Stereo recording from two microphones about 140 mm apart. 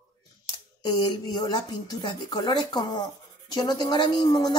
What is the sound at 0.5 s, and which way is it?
Speech, 30° left (ahead or behind).